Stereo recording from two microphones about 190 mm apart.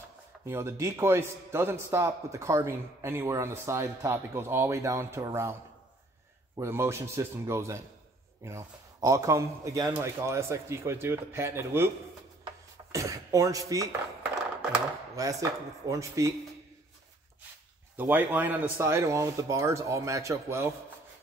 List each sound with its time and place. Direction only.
0.5 s a man's voice: 15° right (ahead or behind)
12.9 s a man's voice: 15° right (ahead or behind)
14.3 s a sound: 5° right (ahead or behind)
15.2 s a man's voice: 15° right (ahead or behind)
17.9 s a man's voice: 10° right (ahead or behind)